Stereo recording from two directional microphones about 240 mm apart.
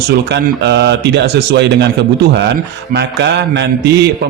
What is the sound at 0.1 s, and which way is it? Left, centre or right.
Speech, right.